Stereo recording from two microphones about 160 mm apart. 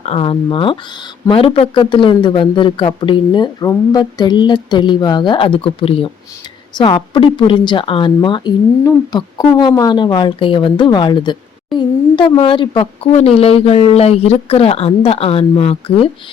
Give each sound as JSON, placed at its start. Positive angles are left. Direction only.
{"t": 0.0, "sound": "a man's voice", "side_deg": 35}